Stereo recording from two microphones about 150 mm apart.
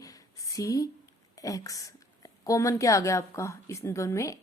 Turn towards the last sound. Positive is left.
turn(degrees=20)  # may be behind; listen again after turning